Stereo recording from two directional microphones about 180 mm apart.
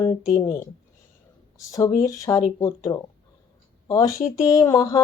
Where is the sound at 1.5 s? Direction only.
15° left (ahead or behind).